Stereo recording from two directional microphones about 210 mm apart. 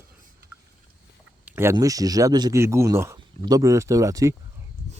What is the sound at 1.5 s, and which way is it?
A man's voice, 10° right (ahead or behind).